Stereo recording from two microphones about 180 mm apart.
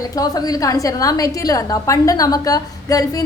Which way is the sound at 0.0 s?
20° left (ahead or behind).